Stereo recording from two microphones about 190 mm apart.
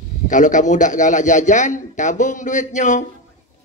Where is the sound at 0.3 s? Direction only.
40° left (ahead or behind).